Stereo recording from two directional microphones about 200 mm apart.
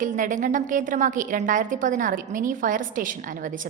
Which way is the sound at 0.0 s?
40° right (ahead or behind).